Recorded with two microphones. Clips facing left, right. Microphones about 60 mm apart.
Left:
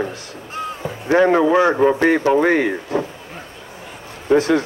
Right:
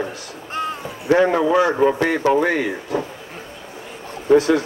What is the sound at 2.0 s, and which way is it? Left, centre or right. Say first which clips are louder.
Speech: left 2 dB; left.